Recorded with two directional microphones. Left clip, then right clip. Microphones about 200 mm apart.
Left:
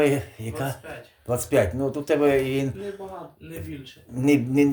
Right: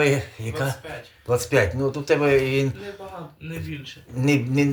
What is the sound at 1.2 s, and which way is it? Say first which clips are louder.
Speech: right 2 dB; 50° left (ahead or behind).